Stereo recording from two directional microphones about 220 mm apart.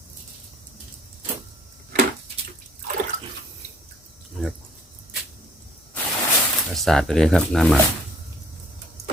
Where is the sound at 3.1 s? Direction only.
25° left (ahead or behind).